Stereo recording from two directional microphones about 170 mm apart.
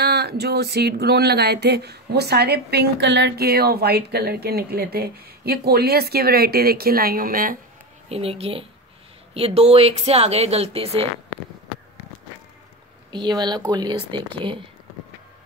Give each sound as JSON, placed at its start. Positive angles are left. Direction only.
{"t": 0.0, "sound": "speech", "side_deg": -70}
{"t": 8.1, "sound": "speech", "side_deg": -35}
{"t": 13.1, "sound": "speech", "side_deg": -25}